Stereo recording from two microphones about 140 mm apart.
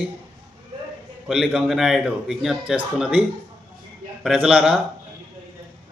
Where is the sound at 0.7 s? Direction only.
30° right (ahead or behind).